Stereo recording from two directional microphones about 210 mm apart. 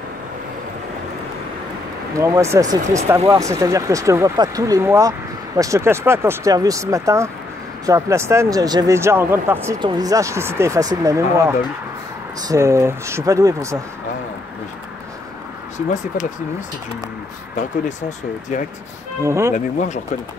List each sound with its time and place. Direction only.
2.1 s speech: 15° right (ahead or behind)
19.2 s speech: 15° right (ahead or behind)
19.5 s speech: 35° left (ahead or behind)